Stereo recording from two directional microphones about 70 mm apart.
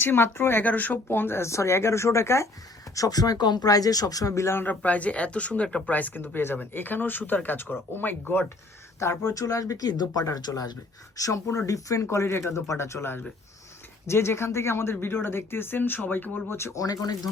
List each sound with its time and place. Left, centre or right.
0.0 s speech: left
1.0 s speech: left
2.9 s speech: left
4.4 s speech: left; by 5.9 s centre
5.9 s speech: left
9.0 s speech: left
11.2 s speech: left
16.7 s speech: left